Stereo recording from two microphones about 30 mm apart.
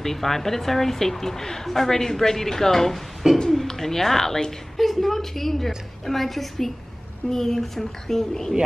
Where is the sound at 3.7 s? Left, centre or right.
Centre.